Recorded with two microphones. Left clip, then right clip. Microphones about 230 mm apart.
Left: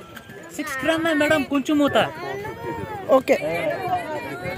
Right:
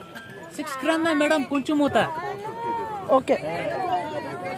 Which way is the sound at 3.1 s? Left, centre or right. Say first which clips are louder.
Left 3 dB; centre.